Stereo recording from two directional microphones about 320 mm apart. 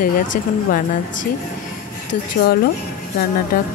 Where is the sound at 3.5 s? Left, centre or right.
Left.